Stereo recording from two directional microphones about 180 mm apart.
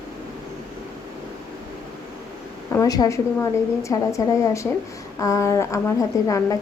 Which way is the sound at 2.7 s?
20° left (ahead or behind).